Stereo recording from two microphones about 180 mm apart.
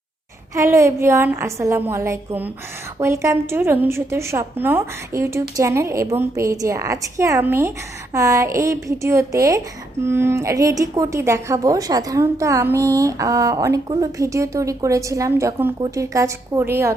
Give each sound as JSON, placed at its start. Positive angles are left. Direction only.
{"t": 0.5, "sound": "a woman's voice", "side_deg": -15}